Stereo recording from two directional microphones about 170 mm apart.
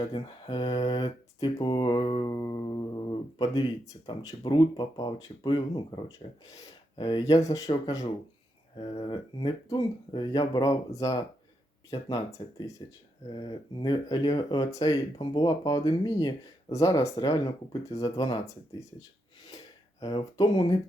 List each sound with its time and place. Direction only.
0.0 s speech: 30° left (ahead or behind)
2.3 s speech: 20° left (ahead or behind)
20.0 s speech: 20° left (ahead or behind)